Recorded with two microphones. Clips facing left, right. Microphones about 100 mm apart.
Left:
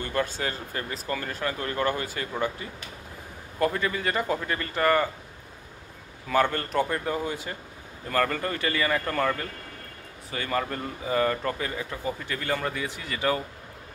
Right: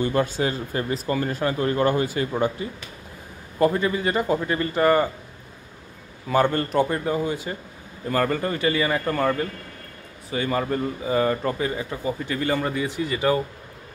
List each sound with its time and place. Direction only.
0.0 s speech: 20° right (ahead or behind)
6.2 s speech: 25° right (ahead or behind)
6.7 s speech: 10° right (ahead or behind)